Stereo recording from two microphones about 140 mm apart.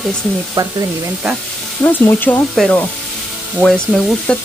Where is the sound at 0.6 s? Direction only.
30° right (ahead or behind).